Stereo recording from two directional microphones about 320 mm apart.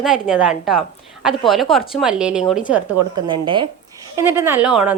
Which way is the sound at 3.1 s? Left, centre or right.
Centre.